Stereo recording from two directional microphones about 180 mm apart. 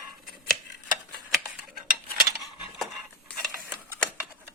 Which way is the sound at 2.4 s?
Centre (ahead or behind).